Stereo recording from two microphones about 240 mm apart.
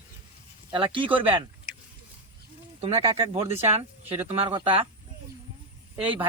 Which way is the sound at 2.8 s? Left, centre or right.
Right.